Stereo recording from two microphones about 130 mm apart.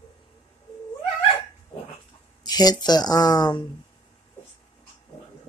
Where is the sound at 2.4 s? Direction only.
30° left (ahead or behind).